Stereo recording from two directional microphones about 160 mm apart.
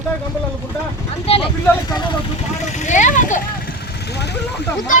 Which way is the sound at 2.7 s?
50° left (ahead or behind).